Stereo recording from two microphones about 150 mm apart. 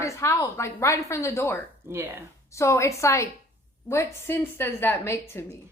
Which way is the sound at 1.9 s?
15° right (ahead or behind).